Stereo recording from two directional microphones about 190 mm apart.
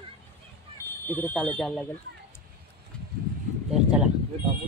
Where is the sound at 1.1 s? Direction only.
10° left (ahead or behind).